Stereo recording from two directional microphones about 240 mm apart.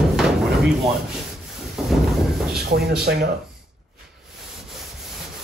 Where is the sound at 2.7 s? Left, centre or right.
Right.